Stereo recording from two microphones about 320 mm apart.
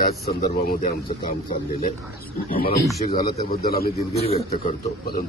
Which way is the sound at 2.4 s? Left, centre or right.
Left.